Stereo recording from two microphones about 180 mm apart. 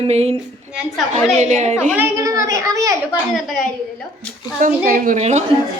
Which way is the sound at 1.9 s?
15° right (ahead or behind).